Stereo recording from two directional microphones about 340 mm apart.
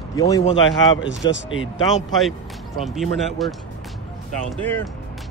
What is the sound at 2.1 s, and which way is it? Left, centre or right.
Speech, centre.